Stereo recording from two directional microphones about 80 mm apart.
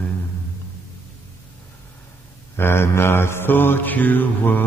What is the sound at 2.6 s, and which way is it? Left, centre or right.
Speech, left.